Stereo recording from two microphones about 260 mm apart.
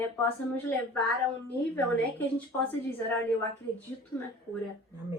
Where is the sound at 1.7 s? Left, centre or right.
Centre.